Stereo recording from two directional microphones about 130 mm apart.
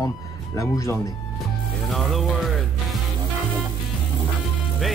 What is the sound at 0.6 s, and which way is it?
Speech, 25° left (ahead or behind).